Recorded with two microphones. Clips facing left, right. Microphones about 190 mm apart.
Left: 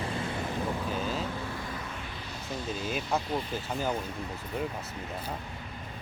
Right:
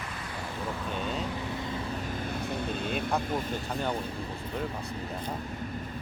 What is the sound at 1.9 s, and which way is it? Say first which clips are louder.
Vehicle: right 7 dB; 45° right (ahead or behind).